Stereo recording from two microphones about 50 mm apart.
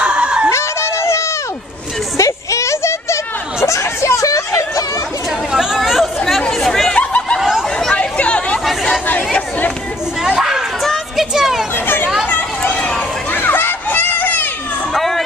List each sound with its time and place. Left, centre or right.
0.0 s chicken: right
0.5 s a sound: left
2.1 s a sound: left
5.5 s chatter: centre
6.6 s chatter: centre
6.9 s chatter: left
7.3 s chatter: centre
7.9 s chatter: left
10.2 s a sound: centre
11.7 s children playing: left
12.7 s chatter: centre
13.3 s children playing: left
15.0 s a sound: centre